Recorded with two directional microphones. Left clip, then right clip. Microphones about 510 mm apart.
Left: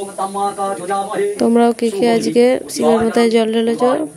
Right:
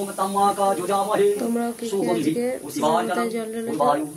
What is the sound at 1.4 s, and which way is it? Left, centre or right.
Speech, right.